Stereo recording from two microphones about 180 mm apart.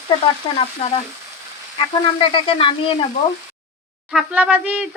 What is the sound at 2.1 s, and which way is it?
Sizzle, 30° left (ahead or behind).